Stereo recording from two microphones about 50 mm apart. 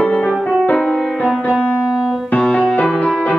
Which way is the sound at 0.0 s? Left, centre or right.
Centre.